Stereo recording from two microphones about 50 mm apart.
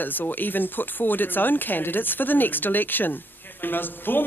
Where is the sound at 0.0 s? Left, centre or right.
Left.